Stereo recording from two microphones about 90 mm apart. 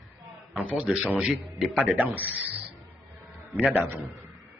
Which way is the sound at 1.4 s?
Centre (ahead or behind).